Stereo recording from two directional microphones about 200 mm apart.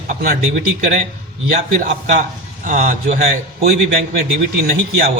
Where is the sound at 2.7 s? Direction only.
40° right (ahead or behind).